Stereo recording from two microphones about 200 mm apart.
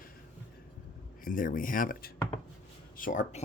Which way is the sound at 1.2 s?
45° left (ahead or behind).